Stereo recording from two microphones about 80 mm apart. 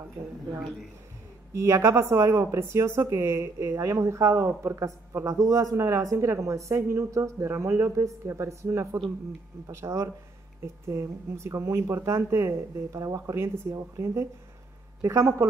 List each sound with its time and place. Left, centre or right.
1.5 s speech: right